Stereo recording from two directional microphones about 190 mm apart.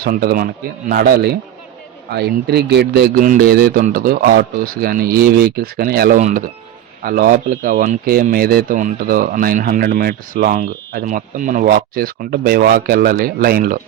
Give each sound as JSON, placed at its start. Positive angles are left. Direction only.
{"t": 0.0, "sound": "a man's voice", "side_deg": -50}
{"t": 3.2, "sound": "speech", "side_deg": -50}